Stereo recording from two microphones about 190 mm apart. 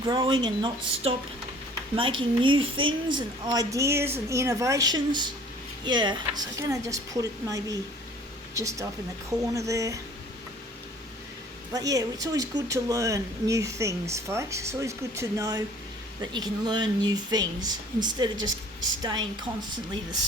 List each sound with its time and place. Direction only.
0.0 s speech: 25° right (ahead or behind)
11.7 s speech: 20° right (ahead or behind)